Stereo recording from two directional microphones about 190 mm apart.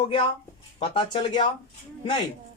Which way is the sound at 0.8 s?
25° left (ahead or behind).